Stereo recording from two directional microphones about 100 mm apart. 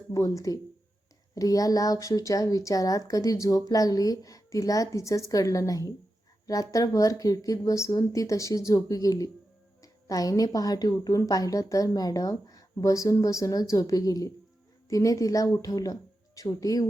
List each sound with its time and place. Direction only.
0.1 s a woman's voice: 35° left (ahead or behind)